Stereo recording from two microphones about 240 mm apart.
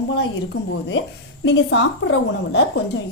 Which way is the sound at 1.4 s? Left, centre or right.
Left.